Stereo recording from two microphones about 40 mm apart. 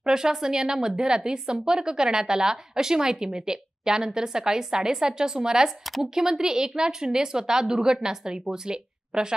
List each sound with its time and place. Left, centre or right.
0.0 s a woman's voice: centre